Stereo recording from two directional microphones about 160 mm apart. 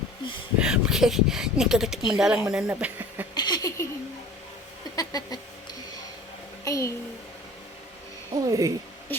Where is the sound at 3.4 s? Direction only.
25° left (ahead or behind).